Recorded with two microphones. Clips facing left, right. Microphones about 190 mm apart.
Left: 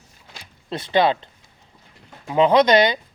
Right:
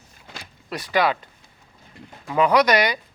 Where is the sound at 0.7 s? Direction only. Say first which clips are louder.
Left 3 dB; 25° left (ahead or behind).